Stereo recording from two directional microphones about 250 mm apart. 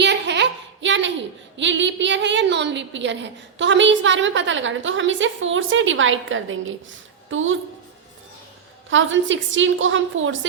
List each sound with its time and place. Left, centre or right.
0.0 s a sound: right
1.5 s a woman's voice: right
8.9 s a woman's voice: right